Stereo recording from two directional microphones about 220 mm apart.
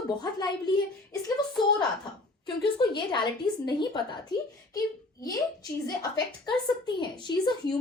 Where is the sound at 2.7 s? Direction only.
20° left (ahead or behind).